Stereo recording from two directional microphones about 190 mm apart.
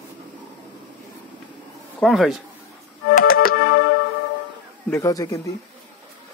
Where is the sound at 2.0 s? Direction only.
Centre (ahead or behind).